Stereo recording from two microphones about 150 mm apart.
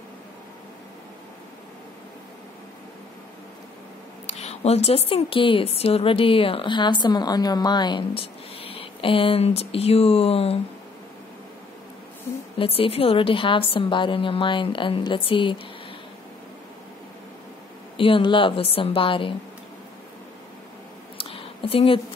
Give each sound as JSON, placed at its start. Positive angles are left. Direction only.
{"t": 4.3, "sound": "a woman's voice", "side_deg": 45}
{"t": 12.5, "sound": "a woman's voice", "side_deg": 40}
{"t": 17.9, "sound": "a woman's voice", "side_deg": 35}
{"t": 21.2, "sound": "a sound", "side_deg": 40}